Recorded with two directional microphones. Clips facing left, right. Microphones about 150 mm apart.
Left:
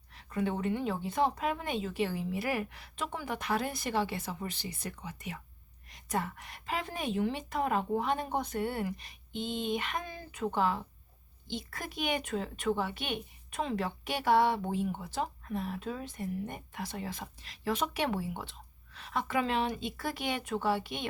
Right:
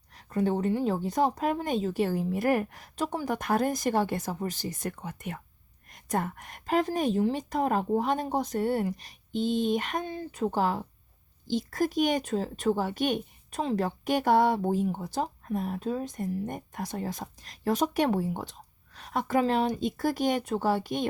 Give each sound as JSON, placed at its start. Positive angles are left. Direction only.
{"t": 0.1, "sound": "speech", "side_deg": -40}
{"t": 10.0, "sound": "speech", "side_deg": -30}